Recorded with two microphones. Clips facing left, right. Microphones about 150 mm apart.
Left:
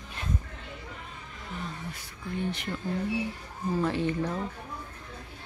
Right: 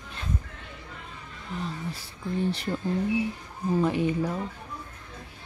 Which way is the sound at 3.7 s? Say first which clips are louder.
Right 3 dB; 15° right (ahead or behind).